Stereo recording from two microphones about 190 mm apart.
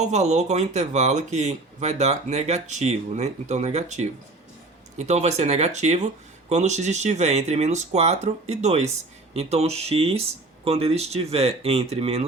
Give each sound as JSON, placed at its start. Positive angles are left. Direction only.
{"t": 0.0, "sound": "speech", "side_deg": -35}